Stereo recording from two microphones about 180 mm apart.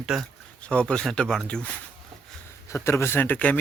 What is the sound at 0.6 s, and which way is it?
Speech, 5° left (ahead or behind).